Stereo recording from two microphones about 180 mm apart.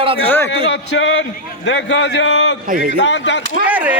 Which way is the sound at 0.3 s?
10° left (ahead or behind).